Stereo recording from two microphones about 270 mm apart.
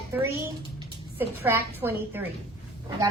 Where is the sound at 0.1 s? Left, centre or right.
Centre.